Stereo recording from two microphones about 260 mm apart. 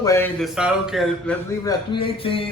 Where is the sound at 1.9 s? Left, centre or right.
Centre.